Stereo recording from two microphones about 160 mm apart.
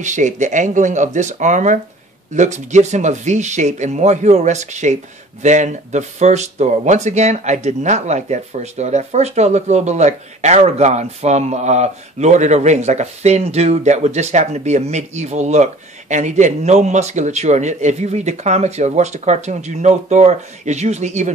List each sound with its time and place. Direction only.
0.0 s speech: 50° right (ahead or behind)